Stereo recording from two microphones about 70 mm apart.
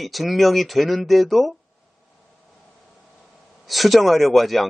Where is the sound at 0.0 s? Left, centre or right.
Centre.